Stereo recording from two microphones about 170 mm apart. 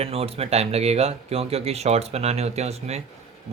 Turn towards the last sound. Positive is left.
turn(degrees=-40)  # may be behind; listen again after turning